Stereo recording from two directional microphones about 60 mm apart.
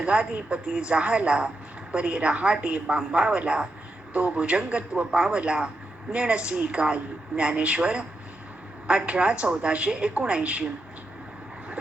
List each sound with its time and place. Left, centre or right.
0.0 s a woman's voice: centre